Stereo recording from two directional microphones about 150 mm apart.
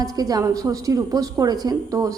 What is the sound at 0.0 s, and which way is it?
A woman's voice, 25° right (ahead or behind).